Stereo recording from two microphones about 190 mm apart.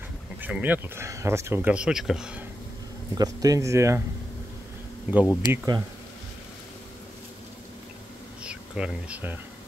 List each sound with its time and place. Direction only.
0.4 s speech: 10° right (ahead or behind)
3.2 s speech: 20° right (ahead or behind)
5.1 s speech: centre (ahead or behind)
5.5 s speech: 20° right (ahead or behind)
8.5 s speech: 5° right (ahead or behind)